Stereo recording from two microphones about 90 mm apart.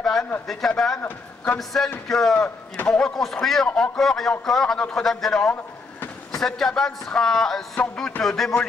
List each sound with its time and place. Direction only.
0.0 s a sound: 5° left (ahead or behind)
0.5 s speech: 5° left (ahead or behind)
1.0 s a man's voice: 20° left (ahead or behind)
1.6 s speech: centre (ahead or behind)
2.3 s speech: 20° left (ahead or behind)
2.9 s a man's voice: 5° left (ahead or behind)